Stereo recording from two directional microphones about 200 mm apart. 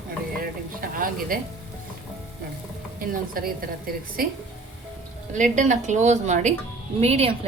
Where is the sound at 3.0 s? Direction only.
45° right (ahead or behind).